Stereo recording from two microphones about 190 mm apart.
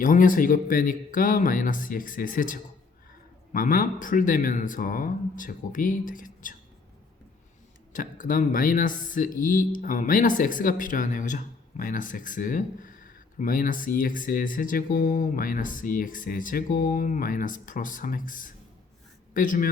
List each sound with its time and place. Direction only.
0.0 s speech: 45° left (ahead or behind)
7.9 s speech: 45° left (ahead or behind)